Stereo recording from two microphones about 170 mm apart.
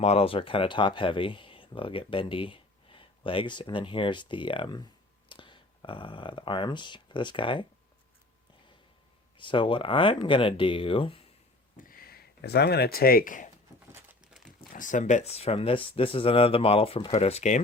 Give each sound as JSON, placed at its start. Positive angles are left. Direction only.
{"t": 0.0, "sound": "speech", "side_deg": 35}
{"t": 9.4, "sound": "speech", "side_deg": 30}
{"t": 11.8, "sound": "speech", "side_deg": 55}
{"t": 13.9, "sound": "a sound", "side_deg": -5}
{"t": 14.7, "sound": "speech", "side_deg": 50}